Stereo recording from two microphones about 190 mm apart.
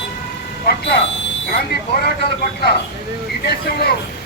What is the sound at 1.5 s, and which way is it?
Speech, 55° left (ahead or behind).